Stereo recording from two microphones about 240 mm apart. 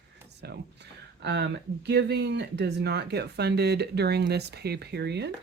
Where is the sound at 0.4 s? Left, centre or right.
Right.